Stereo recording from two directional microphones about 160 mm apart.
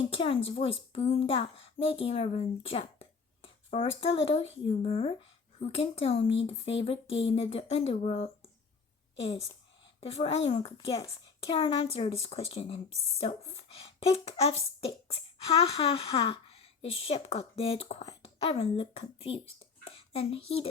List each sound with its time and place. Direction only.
0.1 s a woman's voice: 35° left (ahead or behind)